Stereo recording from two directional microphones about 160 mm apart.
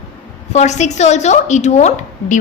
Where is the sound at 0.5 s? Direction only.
45° left (ahead or behind).